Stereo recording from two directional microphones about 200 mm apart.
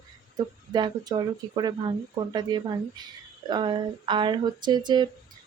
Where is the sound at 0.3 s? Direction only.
20° right (ahead or behind).